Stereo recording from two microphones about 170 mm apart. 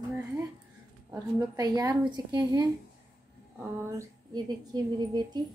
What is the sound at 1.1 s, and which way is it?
A woman's voice, 25° right (ahead or behind).